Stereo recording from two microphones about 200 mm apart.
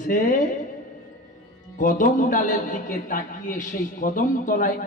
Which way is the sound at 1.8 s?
40° left (ahead or behind).